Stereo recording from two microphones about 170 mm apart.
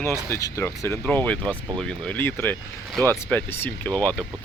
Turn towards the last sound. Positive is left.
turn(degrees=5)  # may be behind; listen again after turning